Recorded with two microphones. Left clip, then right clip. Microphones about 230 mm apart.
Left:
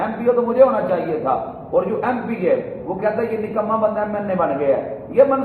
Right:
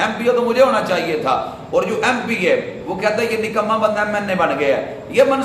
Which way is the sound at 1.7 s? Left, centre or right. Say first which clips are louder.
Right 2 dB; right.